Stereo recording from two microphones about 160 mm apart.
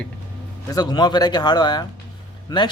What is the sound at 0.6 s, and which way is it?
Speech, 25° left (ahead or behind).